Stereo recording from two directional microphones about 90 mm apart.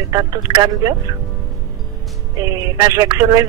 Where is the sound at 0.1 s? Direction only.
40° right (ahead or behind).